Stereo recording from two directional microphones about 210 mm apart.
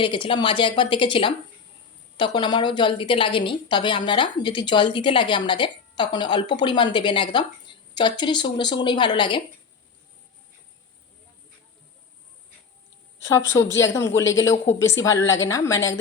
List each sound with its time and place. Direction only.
0.0 s a woman's voice: 25° left (ahead or behind)
13.2 s a man's voice: 15° left (ahead or behind)